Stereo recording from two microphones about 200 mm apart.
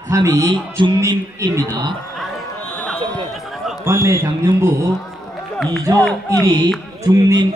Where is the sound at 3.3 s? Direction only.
Centre (ahead or behind).